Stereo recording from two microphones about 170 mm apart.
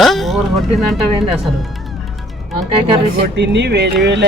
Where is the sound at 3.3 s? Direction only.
90° right.